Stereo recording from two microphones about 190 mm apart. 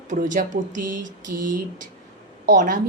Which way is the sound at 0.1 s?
45° right (ahead or behind).